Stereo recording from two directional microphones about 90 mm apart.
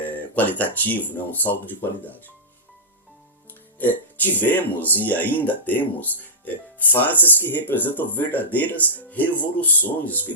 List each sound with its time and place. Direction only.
0.0 s speech: 20° left (ahead or behind)
3.8 s speech: 20° left (ahead or behind)